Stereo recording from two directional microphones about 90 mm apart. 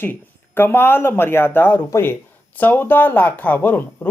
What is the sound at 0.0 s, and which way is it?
Speech, 25° left (ahead or behind).